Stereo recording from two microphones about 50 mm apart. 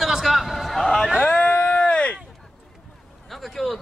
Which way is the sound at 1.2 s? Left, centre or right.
Left.